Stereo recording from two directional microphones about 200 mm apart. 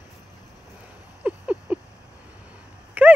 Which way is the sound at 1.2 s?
5° right (ahead or behind).